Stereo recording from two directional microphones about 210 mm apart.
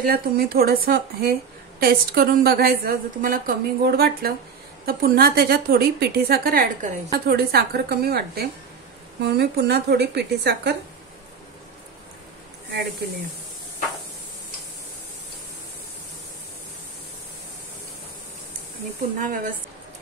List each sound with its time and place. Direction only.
0.0 s a woman's voice: 45° right (ahead or behind)
19.1 s speech: 40° right (ahead or behind)